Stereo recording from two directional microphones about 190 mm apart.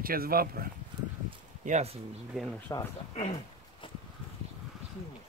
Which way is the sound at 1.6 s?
35° right (ahead or behind).